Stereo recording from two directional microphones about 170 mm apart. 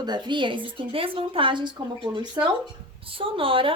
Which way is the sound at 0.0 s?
25° right (ahead or behind).